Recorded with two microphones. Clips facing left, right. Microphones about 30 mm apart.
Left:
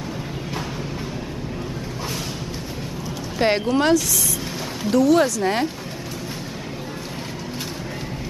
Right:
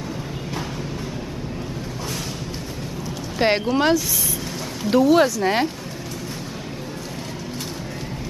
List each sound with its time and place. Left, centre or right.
3.3 s speech: centre
4.9 s speech: centre